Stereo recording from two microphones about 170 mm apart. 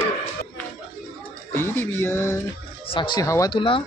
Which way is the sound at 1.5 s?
15° left (ahead or behind).